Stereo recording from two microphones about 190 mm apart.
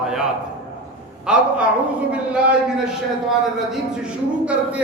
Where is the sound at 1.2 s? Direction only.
5° right (ahead or behind).